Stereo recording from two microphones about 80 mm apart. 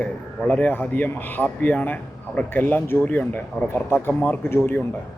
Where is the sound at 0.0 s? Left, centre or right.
Centre.